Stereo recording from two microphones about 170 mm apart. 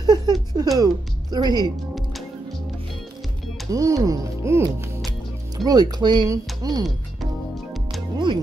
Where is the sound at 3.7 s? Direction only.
20° right (ahead or behind).